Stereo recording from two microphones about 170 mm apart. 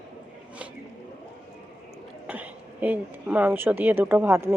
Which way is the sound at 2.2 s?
10° right (ahead or behind).